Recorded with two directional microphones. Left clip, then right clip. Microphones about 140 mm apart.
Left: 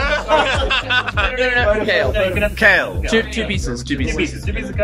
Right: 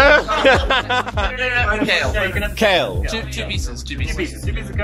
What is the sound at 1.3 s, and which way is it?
Speech, 30° left (ahead or behind).